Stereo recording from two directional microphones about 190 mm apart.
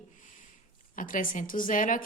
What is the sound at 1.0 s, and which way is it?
A woman's voice, 45° left (ahead or behind).